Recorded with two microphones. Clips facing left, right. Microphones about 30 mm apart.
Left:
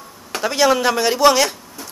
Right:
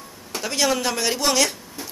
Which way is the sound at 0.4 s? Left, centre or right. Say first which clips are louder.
Left 6 dB; centre.